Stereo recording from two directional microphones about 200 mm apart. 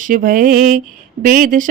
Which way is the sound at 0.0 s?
45° right (ahead or behind).